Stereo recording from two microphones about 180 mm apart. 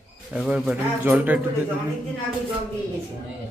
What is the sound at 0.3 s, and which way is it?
Speech, 5° right (ahead or behind).